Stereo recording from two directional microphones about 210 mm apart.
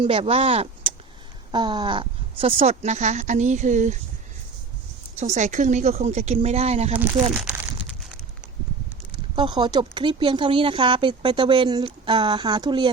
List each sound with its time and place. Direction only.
0.0 s speech: 25° right (ahead or behind)
5.1 s speech: 35° right (ahead or behind)
7.0 s speech: 10° right (ahead or behind)
9.3 s speech: 20° right (ahead or behind)